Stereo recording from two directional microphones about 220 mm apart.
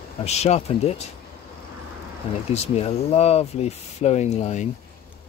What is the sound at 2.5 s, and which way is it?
Speech, 30° left (ahead or behind).